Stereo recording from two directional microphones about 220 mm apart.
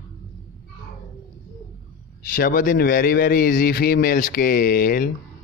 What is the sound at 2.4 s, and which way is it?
Speech, 40° left (ahead or behind).